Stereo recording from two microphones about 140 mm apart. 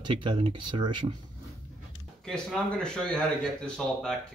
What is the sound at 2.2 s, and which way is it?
A man's voice, 5° left (ahead or behind).